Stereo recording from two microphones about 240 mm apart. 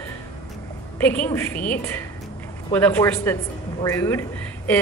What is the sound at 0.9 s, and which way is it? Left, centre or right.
A woman's voice, centre.